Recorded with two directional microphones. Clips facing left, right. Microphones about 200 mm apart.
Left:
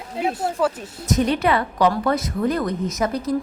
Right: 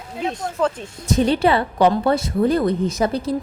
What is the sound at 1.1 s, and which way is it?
A woman's voice, 30° right (ahead or behind).